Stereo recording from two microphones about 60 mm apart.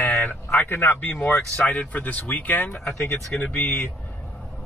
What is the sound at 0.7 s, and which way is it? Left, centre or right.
Speech, left.